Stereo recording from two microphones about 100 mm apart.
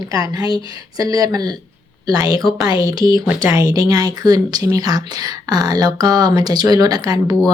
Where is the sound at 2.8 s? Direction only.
35° right (ahead or behind).